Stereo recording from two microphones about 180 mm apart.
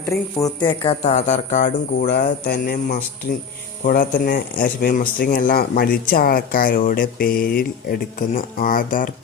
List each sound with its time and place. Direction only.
0.3 s speech: 20° left (ahead or behind); by 2.1 s 45° left (ahead or behind)
2.4 s music: 65° left (ahead or behind)
3.8 s speech: 50° left (ahead or behind)